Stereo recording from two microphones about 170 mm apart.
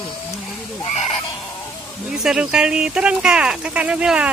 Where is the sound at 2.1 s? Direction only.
5° right (ahead or behind).